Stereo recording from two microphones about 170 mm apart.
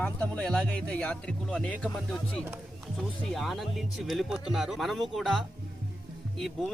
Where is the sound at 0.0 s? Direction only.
10° left (ahead or behind).